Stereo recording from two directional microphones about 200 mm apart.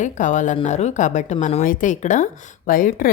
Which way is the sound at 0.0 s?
40° left (ahead or behind).